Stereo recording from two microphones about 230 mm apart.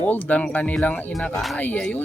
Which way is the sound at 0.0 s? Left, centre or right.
Centre.